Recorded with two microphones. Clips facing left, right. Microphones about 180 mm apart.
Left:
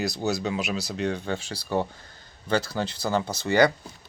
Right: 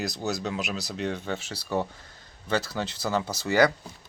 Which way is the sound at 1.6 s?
30° left (ahead or behind).